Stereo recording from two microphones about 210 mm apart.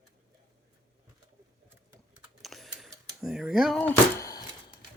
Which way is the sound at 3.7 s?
10° left (ahead or behind).